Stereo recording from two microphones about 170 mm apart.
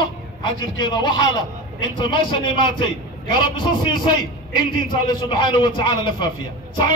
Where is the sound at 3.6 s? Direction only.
25° left (ahead or behind).